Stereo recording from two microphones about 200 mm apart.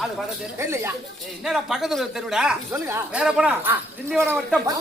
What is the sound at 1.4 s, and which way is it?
Speech, centre (ahead or behind).